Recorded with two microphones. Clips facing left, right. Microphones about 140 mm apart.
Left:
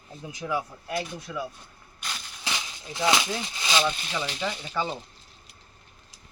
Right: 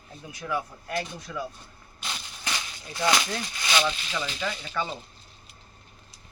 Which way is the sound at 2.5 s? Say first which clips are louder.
Even; 15° left (ahead or behind).